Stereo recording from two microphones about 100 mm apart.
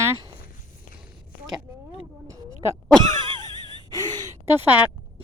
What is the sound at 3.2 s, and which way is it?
Wheeze, 50° right (ahead or behind).